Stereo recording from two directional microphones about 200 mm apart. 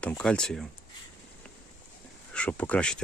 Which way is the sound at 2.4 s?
5° left (ahead or behind).